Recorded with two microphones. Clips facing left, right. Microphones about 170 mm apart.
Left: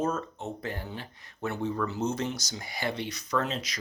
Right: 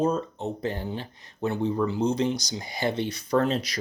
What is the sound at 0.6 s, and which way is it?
Speech, 25° right (ahead or behind).